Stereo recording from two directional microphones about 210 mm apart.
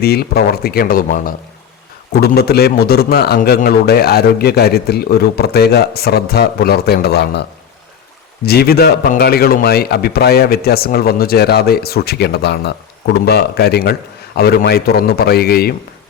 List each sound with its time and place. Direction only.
0.0 s a man's voice: 50° left (ahead or behind)
8.4 s a man's voice: 45° left (ahead or behind)